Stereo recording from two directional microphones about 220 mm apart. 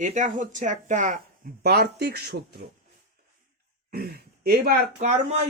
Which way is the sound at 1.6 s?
45° right (ahead or behind).